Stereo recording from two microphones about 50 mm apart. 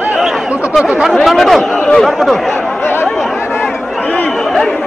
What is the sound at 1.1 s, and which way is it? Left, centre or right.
Chatter, centre.